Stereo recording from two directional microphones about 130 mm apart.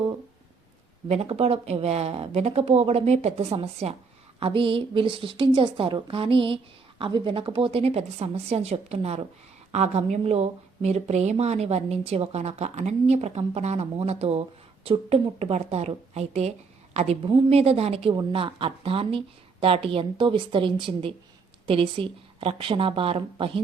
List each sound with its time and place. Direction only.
1.0 s a woman's voice: 55° right (ahead or behind)
14.8 s a woman's voice: 40° right (ahead or behind)
18.1 s speech: 35° right (ahead or behind)